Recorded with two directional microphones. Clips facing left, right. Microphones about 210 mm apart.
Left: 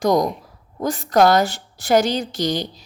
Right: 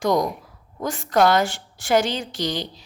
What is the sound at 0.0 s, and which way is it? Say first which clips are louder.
A woman's voice: left 3 dB; 40° left (ahead or behind).